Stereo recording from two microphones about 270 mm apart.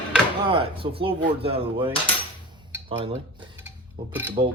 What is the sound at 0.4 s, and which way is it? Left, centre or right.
Speech, centre.